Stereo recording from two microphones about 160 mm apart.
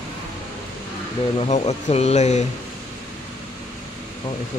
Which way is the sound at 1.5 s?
45° left (ahead or behind).